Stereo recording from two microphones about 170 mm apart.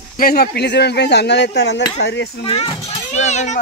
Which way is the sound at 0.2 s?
65° left (ahead or behind).